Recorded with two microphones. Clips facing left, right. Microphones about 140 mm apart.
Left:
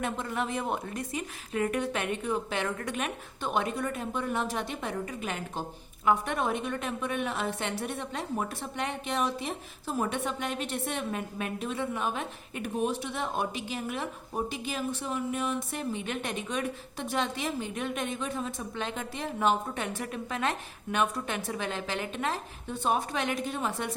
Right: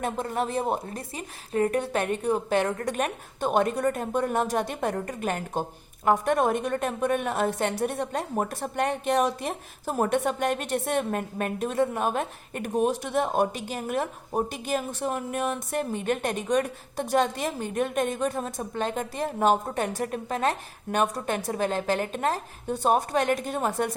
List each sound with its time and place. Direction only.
0.0 s a woman's voice: 40° right (ahead or behind)